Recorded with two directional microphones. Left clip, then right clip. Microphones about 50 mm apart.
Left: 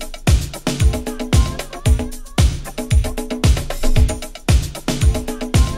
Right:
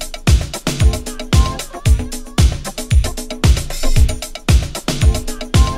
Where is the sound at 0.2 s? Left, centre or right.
Left.